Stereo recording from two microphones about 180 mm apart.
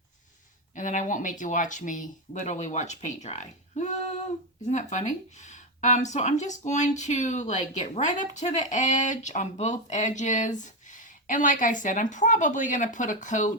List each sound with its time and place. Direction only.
0.8 s speech: 45° left (ahead or behind)